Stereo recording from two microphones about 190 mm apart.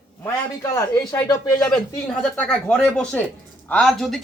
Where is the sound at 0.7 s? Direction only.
15° left (ahead or behind).